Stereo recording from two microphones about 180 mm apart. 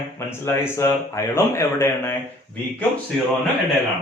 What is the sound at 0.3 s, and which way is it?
Speech, 15° left (ahead or behind).